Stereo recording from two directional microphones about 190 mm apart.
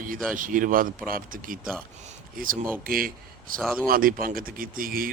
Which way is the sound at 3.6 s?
Centre (ahead or behind).